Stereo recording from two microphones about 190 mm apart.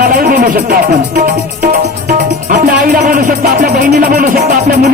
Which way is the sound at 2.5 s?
45° right (ahead or behind).